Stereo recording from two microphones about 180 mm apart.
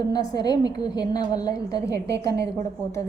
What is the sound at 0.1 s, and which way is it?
A woman's voice, 20° left (ahead or behind).